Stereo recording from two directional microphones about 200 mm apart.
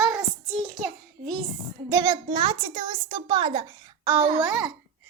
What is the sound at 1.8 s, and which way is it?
A woman's voice, 15° right (ahead or behind).